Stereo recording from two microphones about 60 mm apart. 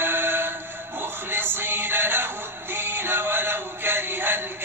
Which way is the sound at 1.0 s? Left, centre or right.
Right.